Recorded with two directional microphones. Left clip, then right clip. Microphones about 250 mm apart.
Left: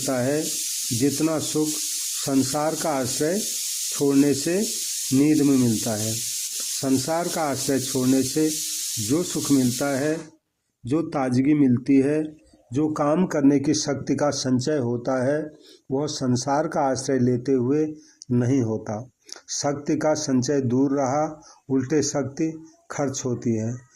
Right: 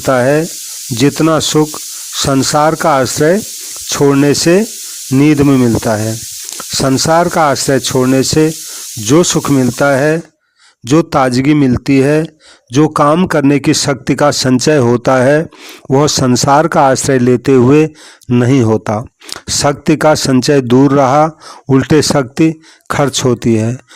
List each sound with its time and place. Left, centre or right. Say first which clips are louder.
0.0 s speech: right 14 dB; right
14.3 s speech: right 14 dB; right
14.6 s speech: right 15 dB; right
20.1 s speech: right 12 dB; right
20.5 s speech: right 15 dB; right
23.1 s speech: right 15 dB; right